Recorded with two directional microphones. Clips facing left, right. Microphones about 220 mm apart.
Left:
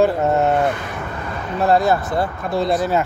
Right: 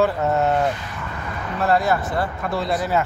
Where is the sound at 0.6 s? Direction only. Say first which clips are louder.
Left 3 dB; 55° left (ahead or behind).